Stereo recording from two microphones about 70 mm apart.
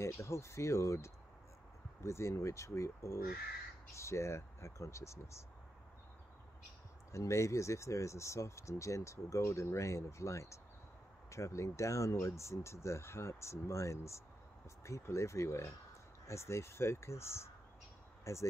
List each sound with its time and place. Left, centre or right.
0.0 s speech: left
7.1 s speech: left